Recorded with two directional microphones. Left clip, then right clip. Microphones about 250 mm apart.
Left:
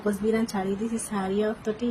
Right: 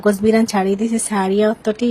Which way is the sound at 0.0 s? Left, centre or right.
Right.